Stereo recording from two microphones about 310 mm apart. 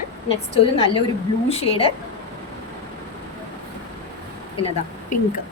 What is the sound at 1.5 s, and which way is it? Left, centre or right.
Speech, centre.